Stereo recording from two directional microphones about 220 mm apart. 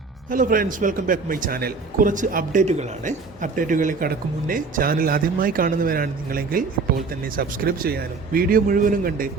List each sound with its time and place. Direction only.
0.3 s a man's voice: 35° right (ahead or behind)